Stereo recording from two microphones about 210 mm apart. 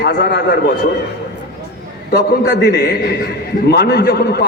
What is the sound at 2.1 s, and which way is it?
A man's voice, 50° left (ahead or behind).